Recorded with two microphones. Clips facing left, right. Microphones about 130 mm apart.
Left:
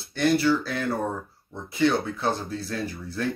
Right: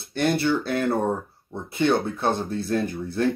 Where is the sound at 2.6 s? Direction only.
55° right (ahead or behind).